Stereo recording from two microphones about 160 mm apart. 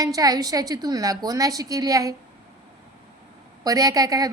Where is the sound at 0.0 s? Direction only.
25° right (ahead or behind).